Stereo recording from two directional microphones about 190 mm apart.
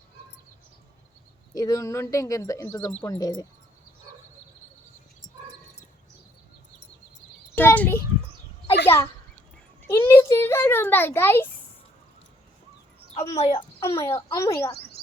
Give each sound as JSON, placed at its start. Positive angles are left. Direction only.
{"t": 1.5, "sound": "speech", "side_deg": 20}
{"t": 7.5, "sound": "a sound", "side_deg": 10}
{"t": 8.9, "sound": "speech", "side_deg": 15}
{"t": 9.8, "sound": "a sound", "side_deg": 15}
{"t": 13.3, "sound": "speech", "side_deg": 30}
{"t": 13.8, "sound": "speech", "side_deg": 15}